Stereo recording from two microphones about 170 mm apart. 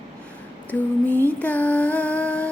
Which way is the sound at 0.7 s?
10° left (ahead or behind).